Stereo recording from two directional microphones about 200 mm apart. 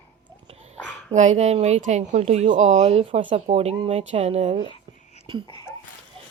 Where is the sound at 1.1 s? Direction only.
35° right (ahead or behind).